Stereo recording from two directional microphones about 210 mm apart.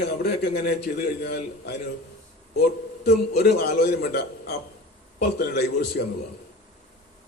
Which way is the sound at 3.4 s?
50° left (ahead or behind).